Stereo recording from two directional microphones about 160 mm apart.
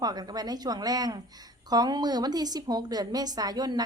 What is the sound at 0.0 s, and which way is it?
A woman's voice, 25° right (ahead or behind).